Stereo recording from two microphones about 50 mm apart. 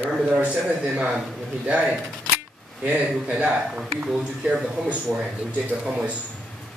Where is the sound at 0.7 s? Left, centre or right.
Right; by 4.6 s centre.